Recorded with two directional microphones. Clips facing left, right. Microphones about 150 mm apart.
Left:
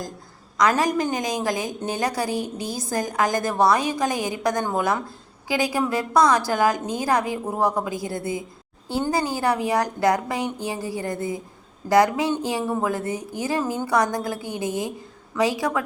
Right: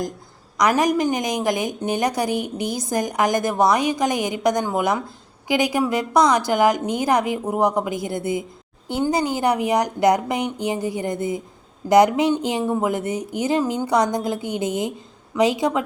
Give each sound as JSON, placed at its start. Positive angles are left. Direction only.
{"t": 0.5, "sound": "a woman's voice", "side_deg": -15}